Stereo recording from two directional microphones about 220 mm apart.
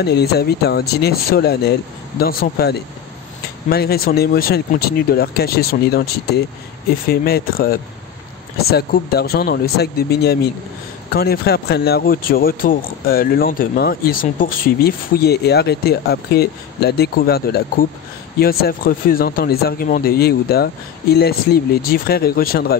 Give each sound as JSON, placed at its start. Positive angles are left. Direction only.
{"t": 0.0, "sound": "speech", "side_deg": 45}